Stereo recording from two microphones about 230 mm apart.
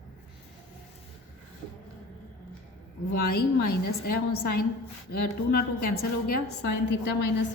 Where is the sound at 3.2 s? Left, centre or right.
Left.